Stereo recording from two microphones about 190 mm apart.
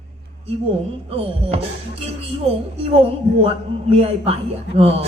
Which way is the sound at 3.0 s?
30° right (ahead or behind).